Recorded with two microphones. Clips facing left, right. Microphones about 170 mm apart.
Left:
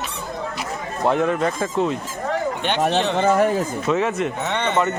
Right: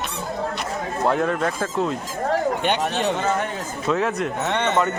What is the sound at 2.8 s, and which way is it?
Speech, 55° left (ahead or behind).